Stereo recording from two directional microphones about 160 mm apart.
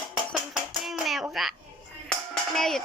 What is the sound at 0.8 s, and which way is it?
Hands, centre (ahead or behind).